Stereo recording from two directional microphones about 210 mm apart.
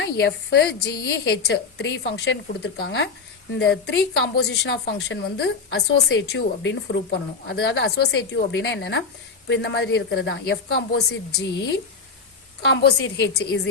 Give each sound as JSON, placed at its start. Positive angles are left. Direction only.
{"t": 0.0, "sound": "a woman's voice", "side_deg": 55}
{"t": 12.6, "sound": "a woman's voice", "side_deg": 55}